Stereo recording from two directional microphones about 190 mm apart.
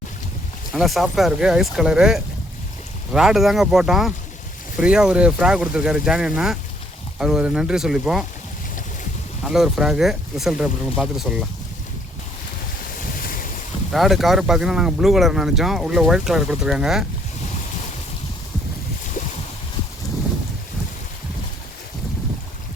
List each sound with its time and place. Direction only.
0.7 s speech: centre (ahead or behind)
9.4 s speech: centre (ahead or behind)
13.1 s boat: 50° left (ahead or behind)
13.9 s speech: centre (ahead or behind)